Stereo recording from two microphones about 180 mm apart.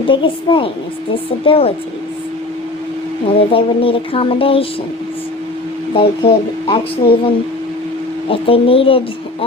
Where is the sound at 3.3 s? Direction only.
30° left (ahead or behind).